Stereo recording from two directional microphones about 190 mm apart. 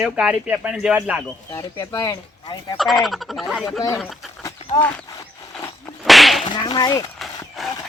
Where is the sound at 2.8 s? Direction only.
Centre (ahead or behind).